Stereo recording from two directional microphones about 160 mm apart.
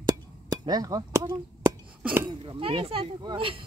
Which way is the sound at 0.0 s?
25° right (ahead or behind).